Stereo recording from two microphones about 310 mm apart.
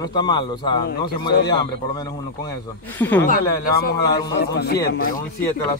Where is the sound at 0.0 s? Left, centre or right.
Centre.